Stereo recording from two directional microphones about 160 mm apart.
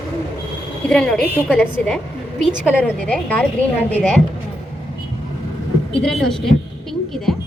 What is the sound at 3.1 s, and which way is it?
A woman's voice, 10° left (ahead or behind).